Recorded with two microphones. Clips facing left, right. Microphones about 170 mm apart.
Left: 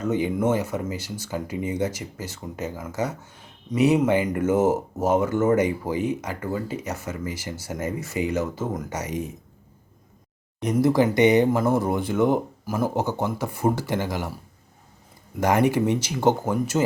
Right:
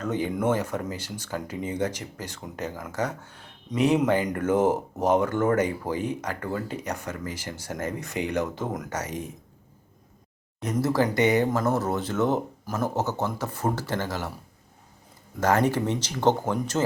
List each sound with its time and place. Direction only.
0.0 s speech: 10° left (ahead or behind)
10.6 s speech: 15° left (ahead or behind)
15.4 s speech: 15° left (ahead or behind)